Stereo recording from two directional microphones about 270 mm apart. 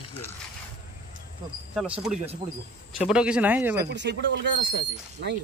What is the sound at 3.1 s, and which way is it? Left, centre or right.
Speech, centre.